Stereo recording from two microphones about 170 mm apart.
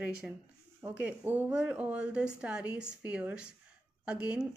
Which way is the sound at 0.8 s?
10° right (ahead or behind).